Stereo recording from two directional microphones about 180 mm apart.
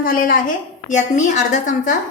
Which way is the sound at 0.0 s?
50° left (ahead or behind).